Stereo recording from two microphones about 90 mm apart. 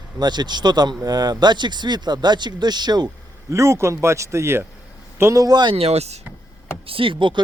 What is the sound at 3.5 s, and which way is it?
Speech, 30° right (ahead or behind).